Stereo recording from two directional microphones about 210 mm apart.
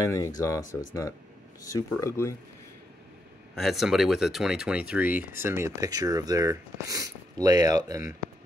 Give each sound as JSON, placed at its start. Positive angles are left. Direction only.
{"t": 0.0, "sound": "speech", "side_deg": 15}
{"t": 3.5, "sound": "speech", "side_deg": 0}